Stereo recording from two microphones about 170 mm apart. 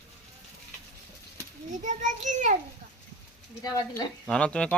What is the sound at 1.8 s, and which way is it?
Speech, 45° right (ahead or behind).